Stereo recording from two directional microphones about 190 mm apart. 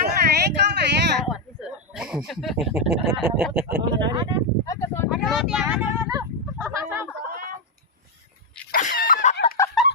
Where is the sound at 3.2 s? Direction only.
5° right (ahead or behind).